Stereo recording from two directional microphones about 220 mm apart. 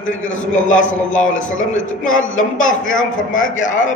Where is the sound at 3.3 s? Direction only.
35° left (ahead or behind).